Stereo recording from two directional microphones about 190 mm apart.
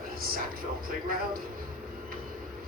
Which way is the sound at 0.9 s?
50° right (ahead or behind).